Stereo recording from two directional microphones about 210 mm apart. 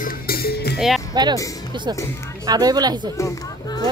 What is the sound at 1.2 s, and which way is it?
Speech, 20° right (ahead or behind).